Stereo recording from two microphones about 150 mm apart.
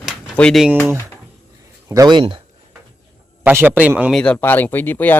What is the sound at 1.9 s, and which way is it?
Speech, 25° right (ahead or behind).